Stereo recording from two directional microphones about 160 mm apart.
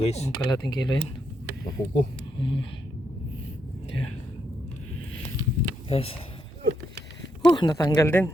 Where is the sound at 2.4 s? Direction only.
30° left (ahead or behind).